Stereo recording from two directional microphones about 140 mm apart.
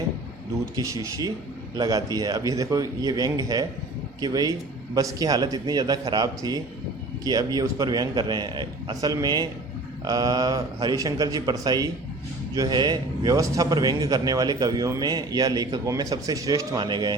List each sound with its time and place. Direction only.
0.8 s a man's voice: 25° right (ahead or behind)